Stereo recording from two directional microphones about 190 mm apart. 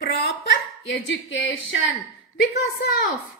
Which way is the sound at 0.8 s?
70° left (ahead or behind).